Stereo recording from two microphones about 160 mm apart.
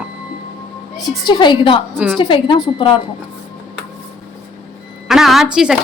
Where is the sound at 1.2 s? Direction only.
30° left (ahead or behind).